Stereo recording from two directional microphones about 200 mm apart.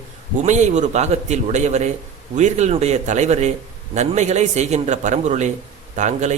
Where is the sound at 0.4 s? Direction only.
35° right (ahead or behind).